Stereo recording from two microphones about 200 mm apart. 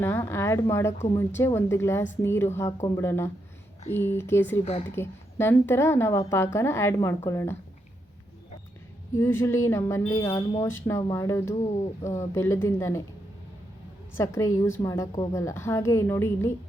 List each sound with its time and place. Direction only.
0.0 s speech: 10° left (ahead or behind)
9.1 s speech: 15° left (ahead or behind)
14.2 s speech: 15° left (ahead or behind)